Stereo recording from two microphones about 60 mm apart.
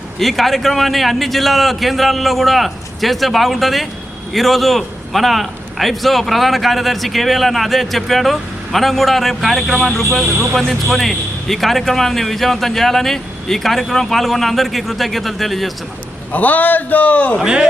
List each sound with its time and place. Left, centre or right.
0.2 s a man's voice: centre
16.3 s a man's voice: left
17.4 s a man's voice: centre